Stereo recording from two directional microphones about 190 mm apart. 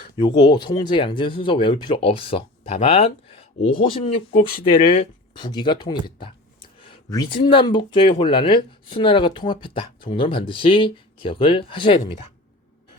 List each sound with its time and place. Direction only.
0.0 s speech: 25° left (ahead or behind)